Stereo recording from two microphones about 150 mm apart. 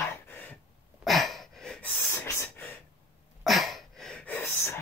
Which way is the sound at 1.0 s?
Centre (ahead or behind).